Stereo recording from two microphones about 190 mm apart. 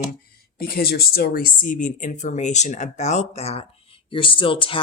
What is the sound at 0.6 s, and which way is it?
Speech, 50° left (ahead or behind).